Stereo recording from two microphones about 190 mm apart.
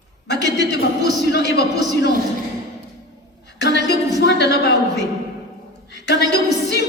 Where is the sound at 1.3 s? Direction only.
60° left (ahead or behind).